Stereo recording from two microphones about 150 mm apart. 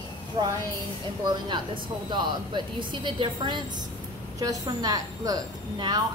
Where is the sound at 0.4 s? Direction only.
30° right (ahead or behind).